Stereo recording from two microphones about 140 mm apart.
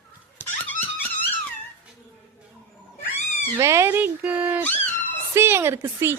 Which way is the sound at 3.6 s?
20° right (ahead or behind).